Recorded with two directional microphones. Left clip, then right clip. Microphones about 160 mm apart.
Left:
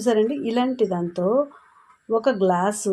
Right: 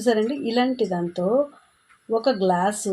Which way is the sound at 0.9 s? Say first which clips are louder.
Even; 5° left (ahead or behind).